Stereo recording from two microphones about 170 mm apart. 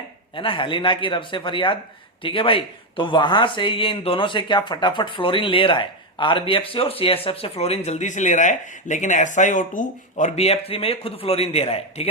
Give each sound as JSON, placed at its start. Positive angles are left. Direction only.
{"t": 0.3, "sound": "speech", "side_deg": 30}